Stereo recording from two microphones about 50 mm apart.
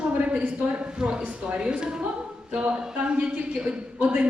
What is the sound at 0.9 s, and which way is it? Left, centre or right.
A woman's voice, right.